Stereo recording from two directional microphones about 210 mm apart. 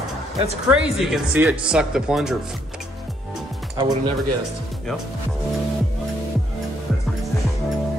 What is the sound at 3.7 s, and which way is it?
Speech, 25° right (ahead or behind).